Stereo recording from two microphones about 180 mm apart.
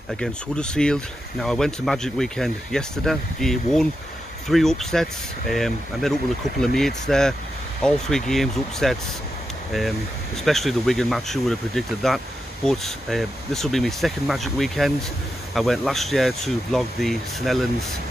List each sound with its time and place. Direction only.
0.2 s speech: 5° left (ahead or behind)